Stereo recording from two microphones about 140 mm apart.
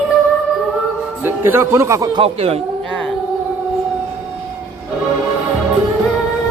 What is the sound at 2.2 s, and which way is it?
Speech, 45° right (ahead or behind).